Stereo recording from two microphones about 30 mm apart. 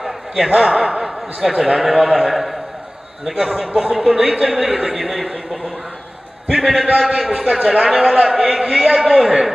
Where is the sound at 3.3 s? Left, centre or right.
Centre.